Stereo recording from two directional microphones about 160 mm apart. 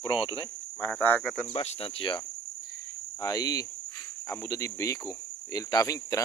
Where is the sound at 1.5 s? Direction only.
35° left (ahead or behind).